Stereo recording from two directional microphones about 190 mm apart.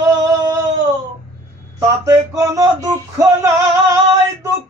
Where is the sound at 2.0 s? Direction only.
15° right (ahead or behind).